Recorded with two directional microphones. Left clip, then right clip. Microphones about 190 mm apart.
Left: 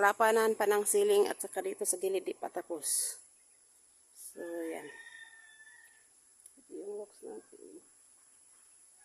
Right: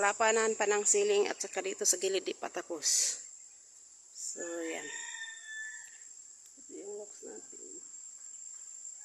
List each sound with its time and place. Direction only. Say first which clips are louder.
0.0 s speech: left 2 dB; 30° left (ahead or behind); by 3.2 s 15° left (ahead or behind)
4.4 s speech: even; 10° left (ahead or behind)